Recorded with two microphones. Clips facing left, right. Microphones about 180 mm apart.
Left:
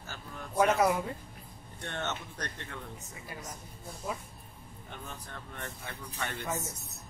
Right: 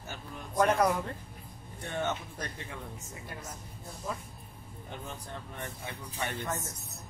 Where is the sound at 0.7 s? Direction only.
5° left (ahead or behind).